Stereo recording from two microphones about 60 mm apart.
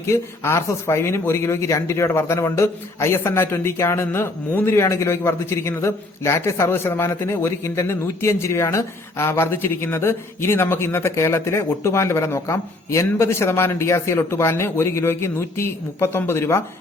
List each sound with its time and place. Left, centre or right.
0.1 s speech: left